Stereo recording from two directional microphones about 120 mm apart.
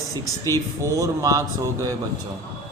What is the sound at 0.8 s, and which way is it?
Speech, 25° right (ahead or behind).